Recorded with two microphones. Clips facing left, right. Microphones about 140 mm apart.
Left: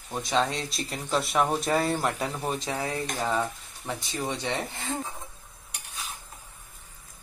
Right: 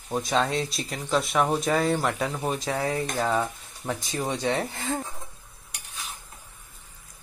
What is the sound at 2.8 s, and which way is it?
Speech, 15° right (ahead or behind).